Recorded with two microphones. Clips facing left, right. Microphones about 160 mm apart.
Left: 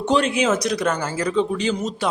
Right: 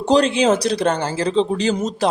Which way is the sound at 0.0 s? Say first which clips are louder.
Right 4 dB; 35° right (ahead or behind).